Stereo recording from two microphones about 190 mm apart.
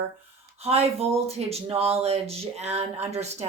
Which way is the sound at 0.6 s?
30° right (ahead or behind).